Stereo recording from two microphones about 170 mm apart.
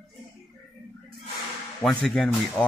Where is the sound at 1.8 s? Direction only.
Centre (ahead or behind).